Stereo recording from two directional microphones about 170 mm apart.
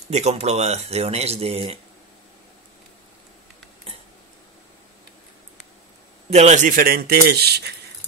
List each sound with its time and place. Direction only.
0.1 s speech: 40° right (ahead or behind)
6.3 s speech: 45° right (ahead or behind); by 7.7 s 70° right (ahead or behind)